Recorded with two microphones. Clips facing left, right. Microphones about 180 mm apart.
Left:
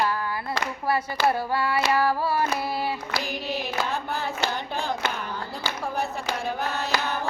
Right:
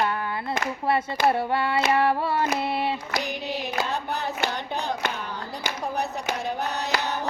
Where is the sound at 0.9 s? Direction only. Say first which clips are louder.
Right 1 dB; 25° right (ahead or behind).